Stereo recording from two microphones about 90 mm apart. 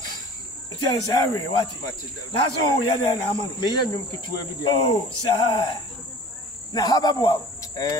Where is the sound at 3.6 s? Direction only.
55° left (ahead or behind).